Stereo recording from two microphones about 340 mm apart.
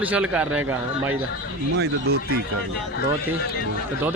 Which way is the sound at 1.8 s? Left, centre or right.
Right.